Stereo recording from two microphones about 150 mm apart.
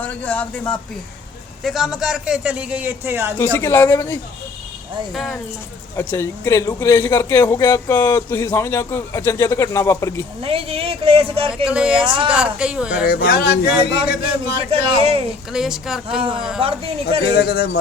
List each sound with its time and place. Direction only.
0.0 s a woman's voice: 10° left (ahead or behind); by 3.3 s 15° right (ahead or behind)
3.3 s a woman's voice: 10° left (ahead or behind)
6.0 s a man's voice: 15° left (ahead or behind)
10.4 s speech: 40° right (ahead or behind)
11.6 s speech: 5° right (ahead or behind)
12.0 s speech: 35° right (ahead or behind)
12.3 s a man's voice: 5° right (ahead or behind)
13.1 s speech: 90° left
14.7 s speech: 40° right (ahead or behind)
15.5 s speech: 5° right (ahead or behind)
16.6 s speech: 40° right (ahead or behind)
17.3 s speech: 90° left